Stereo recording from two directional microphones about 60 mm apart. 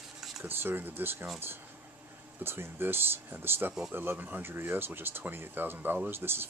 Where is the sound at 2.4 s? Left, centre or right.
Right.